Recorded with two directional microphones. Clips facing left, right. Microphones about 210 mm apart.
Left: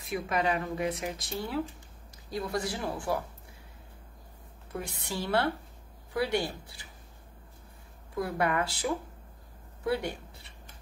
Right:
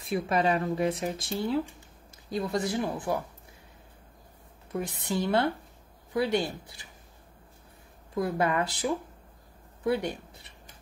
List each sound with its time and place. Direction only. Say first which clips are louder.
0.0 s speech: right 3 dB; 30° right (ahead or behind)
4.7 s speech: right 5 dB; 20° right (ahead or behind)
8.1 s speech: right 2 dB; 20° right (ahead or behind)